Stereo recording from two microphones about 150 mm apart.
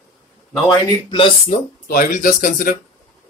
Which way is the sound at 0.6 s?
35° left (ahead or behind).